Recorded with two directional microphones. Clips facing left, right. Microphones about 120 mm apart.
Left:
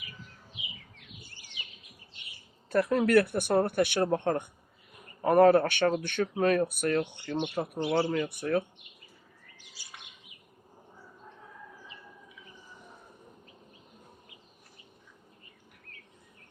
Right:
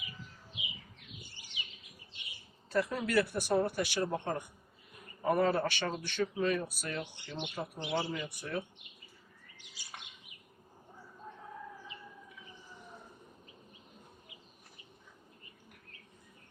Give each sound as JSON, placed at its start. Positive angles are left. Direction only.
{"t": 2.6, "sound": "speech", "side_deg": 55}